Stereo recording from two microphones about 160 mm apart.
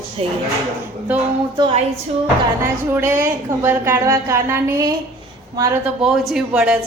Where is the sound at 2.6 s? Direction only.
15° right (ahead or behind).